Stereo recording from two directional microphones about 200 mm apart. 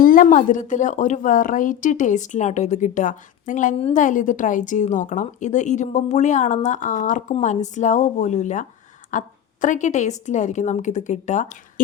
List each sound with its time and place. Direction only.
0.0 s a woman's voice: 45° left (ahead or behind)